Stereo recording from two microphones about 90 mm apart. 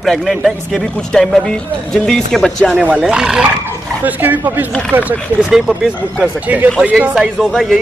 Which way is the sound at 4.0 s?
20° right (ahead or behind).